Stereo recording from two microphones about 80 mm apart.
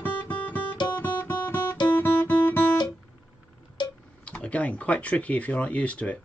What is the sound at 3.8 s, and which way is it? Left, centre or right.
Tick-tock, left.